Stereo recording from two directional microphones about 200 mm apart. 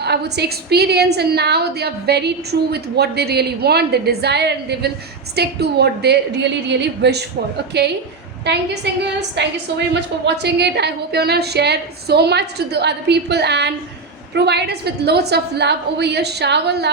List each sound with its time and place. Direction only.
0.0 s a woman's voice: 55° right (ahead or behind)